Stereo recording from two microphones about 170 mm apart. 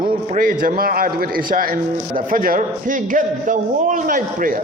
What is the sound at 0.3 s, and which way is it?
A man's voice, 55° right (ahead or behind).